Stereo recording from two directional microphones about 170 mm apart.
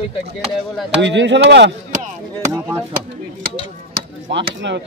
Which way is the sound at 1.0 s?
90° right.